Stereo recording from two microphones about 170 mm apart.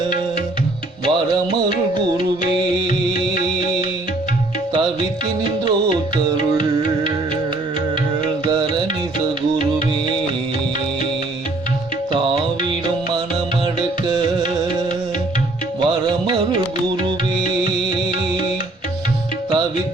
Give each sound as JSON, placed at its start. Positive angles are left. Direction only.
{"t": 2.6, "sound": "music", "side_deg": -25}
{"t": 9.6, "sound": "music", "side_deg": -25}
{"t": 15.8, "sound": "music", "side_deg": -30}